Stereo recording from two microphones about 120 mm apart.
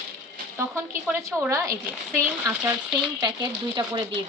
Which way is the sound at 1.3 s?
Centre (ahead or behind).